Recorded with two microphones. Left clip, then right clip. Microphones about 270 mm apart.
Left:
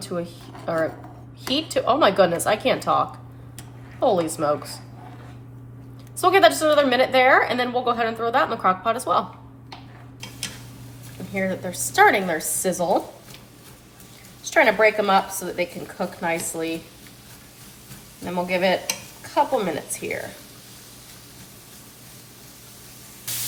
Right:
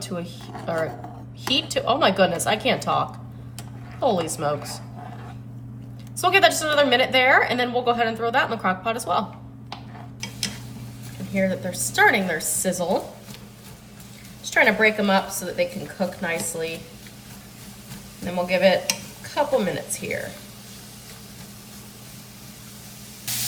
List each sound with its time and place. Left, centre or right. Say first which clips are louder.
0.0 s speech: left 3 dB; centre
1.5 s a woman's voice: left 2 dB; centre
6.1 s a woman's voice: left 2 dB; centre
11.3 s a woman's voice: right 2 dB; centre
14.4 s a woman's voice: left 1 dB; centre
18.3 s a woman's voice: right 2 dB; centre